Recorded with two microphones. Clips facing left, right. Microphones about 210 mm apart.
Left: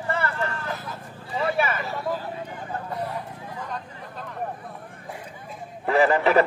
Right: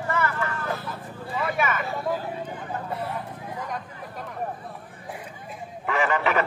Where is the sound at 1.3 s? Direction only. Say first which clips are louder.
Left 2 dB; 30° left (ahead or behind).